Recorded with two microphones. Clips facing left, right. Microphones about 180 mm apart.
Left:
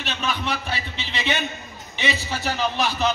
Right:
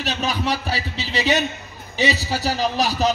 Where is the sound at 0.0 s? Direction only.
40° right (ahead or behind).